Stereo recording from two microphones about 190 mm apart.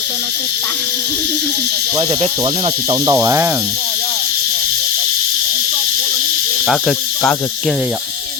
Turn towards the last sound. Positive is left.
turn(degrees=-5)  # may be behind; listen again after turning